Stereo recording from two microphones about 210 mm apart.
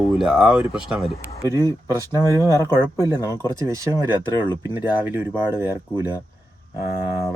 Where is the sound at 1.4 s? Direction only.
15° right (ahead or behind).